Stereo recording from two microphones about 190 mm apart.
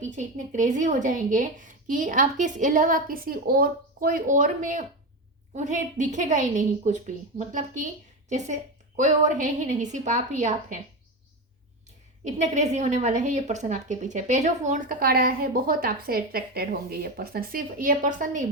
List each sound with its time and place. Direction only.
0.0 s a woman's voice: 40° right (ahead or behind)
12.4 s a woman's voice: 40° right (ahead or behind)